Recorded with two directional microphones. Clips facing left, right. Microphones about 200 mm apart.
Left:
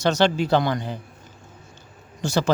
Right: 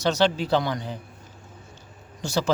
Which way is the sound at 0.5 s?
55° left (ahead or behind).